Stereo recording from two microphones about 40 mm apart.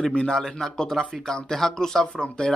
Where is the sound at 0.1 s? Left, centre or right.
Left.